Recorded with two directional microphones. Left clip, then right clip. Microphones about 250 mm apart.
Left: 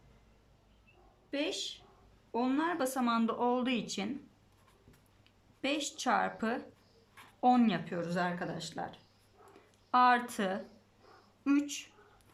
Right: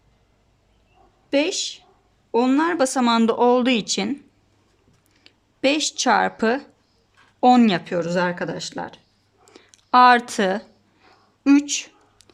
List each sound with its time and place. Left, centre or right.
1.3 s speech: right
5.2 s speech: right
9.5 s a sound: right
11.4 s speech: right